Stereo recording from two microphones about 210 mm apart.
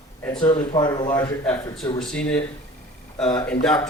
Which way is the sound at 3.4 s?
5° left (ahead or behind).